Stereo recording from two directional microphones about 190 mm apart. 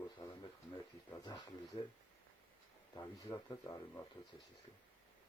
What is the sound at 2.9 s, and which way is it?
Speech, 15° left (ahead or behind).